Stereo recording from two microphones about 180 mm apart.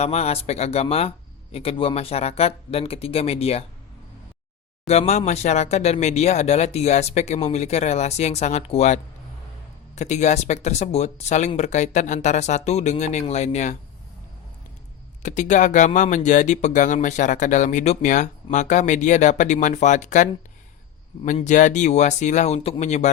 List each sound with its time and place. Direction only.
0.0 s speech: 35° left (ahead or behind)
4.9 s speech: 35° left (ahead or behind)
15.2 s speech: 40° left (ahead or behind)
21.3 s speech: 45° left (ahead or behind)